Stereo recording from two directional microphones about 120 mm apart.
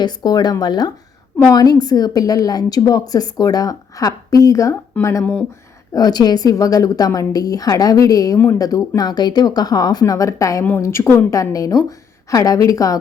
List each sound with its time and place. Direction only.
0.0 s a woman's voice: 35° left (ahead or behind)
5.2 s speech: 15° left (ahead or behind)
5.9 s a woman's voice: 35° left (ahead or behind)